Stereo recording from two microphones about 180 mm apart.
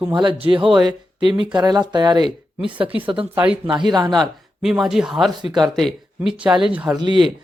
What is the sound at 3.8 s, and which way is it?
Speech, 25° right (ahead or behind).